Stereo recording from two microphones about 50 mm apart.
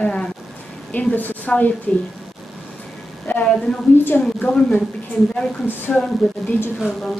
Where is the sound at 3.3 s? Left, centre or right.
Left.